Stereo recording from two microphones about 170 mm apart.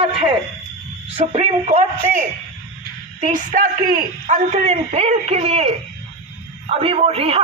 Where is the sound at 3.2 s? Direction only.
50° right (ahead or behind).